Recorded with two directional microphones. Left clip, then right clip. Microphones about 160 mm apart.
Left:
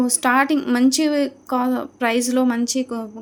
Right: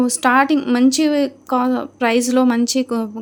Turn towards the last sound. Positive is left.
turn(degrees=-30)  # may be behind; listen again after turning